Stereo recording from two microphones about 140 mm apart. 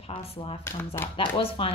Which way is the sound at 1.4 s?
45° left (ahead or behind).